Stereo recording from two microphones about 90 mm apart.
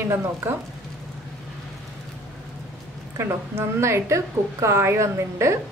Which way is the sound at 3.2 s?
30° right (ahead or behind).